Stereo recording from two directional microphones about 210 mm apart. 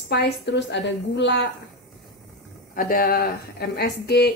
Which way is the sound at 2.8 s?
45° left (ahead or behind).